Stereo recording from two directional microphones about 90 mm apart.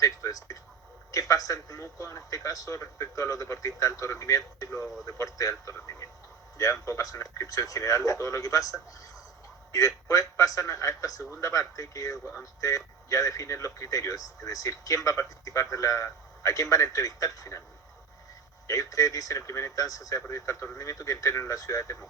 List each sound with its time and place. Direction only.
0.0 s a sound: 40° left (ahead or behind)
1.1 s speech: 40° left (ahead or behind)
18.7 s speech: 40° left (ahead or behind)